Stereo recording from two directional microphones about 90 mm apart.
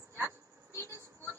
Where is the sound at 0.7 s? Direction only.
30° left (ahead or behind).